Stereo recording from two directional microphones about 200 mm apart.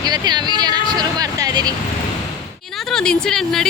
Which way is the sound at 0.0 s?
20° right (ahead or behind).